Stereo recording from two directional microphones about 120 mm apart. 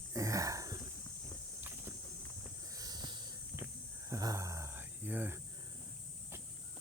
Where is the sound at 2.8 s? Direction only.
35° right (ahead or behind).